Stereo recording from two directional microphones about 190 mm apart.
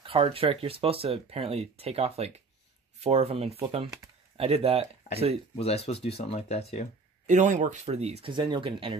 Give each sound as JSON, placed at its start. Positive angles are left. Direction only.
{"t": 0.0, "sound": "speech", "side_deg": -30}
{"t": 5.6, "sound": "speech", "side_deg": 30}
{"t": 7.2, "sound": "speech", "side_deg": -40}